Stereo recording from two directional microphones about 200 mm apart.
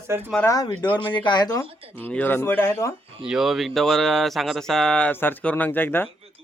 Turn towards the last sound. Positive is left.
turn(degrees=10)  # may be behind; listen again after turning